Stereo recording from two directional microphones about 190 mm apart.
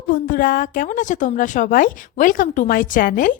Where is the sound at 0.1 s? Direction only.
45° left (ahead or behind).